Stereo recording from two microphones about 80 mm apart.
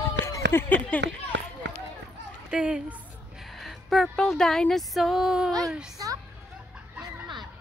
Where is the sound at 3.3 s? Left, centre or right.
Centre.